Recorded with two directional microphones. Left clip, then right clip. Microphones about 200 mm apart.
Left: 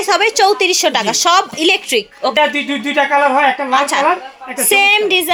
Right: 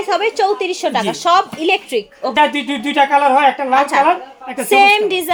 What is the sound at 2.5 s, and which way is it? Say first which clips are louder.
Speech: left 1 dB; 60° right (ahead or behind).